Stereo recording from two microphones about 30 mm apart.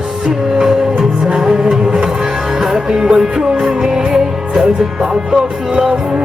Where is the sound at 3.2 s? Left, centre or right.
Right.